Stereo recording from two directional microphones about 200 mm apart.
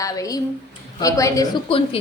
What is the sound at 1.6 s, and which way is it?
Speech, 30° left (ahead or behind).